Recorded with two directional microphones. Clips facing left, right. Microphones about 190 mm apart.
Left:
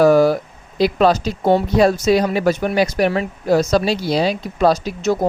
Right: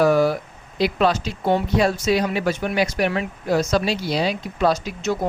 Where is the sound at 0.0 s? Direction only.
40° left (ahead or behind).